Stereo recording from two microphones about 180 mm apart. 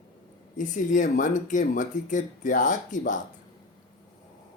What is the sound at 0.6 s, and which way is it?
Speech, 45° left (ahead or behind).